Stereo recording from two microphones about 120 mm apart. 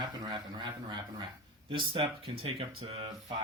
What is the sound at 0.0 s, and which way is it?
A man's voice, 35° right (ahead or behind).